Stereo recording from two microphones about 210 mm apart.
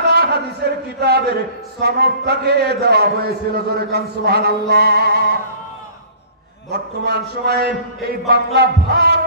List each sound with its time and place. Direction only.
0.1 s a sound: 50° right (ahead or behind)
1.0 s a man's voice: 50° right (ahead or behind)
6.7 s a man's voice: 50° right (ahead or behind)